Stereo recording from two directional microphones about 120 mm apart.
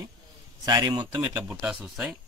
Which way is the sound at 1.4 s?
Centre (ahead or behind).